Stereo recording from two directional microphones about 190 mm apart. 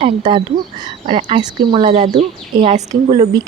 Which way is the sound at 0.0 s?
30° right (ahead or behind).